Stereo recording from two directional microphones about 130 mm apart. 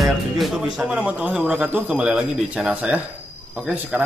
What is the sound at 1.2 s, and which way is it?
Speech, 10° right (ahead or behind).